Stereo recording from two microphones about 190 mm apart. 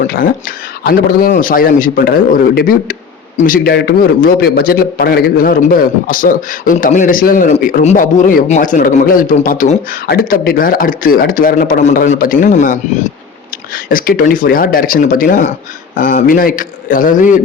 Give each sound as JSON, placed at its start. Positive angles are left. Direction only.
{"t": 0.0, "sound": "a man's voice", "side_deg": 45}